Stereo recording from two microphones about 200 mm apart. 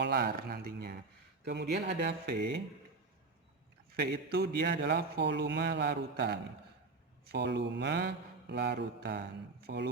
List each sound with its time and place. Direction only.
0.0 s speech: 55° right (ahead or behind)
3.9 s speech: 50° right (ahead or behind)